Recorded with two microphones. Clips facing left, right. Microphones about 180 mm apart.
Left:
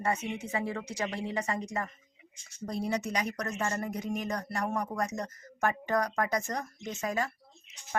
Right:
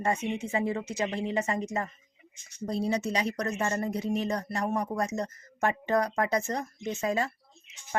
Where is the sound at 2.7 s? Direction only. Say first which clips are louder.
Right 3 dB; 25° right (ahead or behind).